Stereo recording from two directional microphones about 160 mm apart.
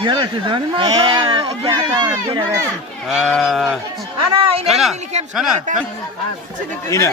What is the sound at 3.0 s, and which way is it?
Speech, centre (ahead or behind).